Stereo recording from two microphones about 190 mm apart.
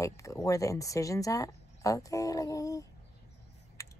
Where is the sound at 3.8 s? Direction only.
15° left (ahead or behind).